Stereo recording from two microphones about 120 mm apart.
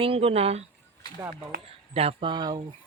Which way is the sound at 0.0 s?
50° right (ahead or behind).